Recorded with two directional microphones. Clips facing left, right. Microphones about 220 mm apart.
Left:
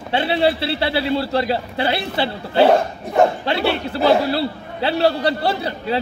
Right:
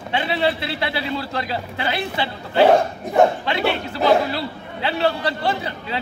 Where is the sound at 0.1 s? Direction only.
30° left (ahead or behind).